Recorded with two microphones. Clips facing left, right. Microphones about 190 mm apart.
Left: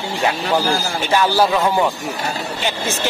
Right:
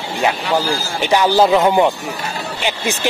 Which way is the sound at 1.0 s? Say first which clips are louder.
Right 4 dB; 15° right (ahead or behind).